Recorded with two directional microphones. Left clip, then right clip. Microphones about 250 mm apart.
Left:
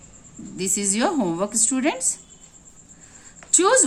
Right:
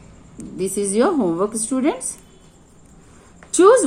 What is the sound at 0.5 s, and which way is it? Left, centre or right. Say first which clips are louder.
A woman's voice: right 5 dB; left.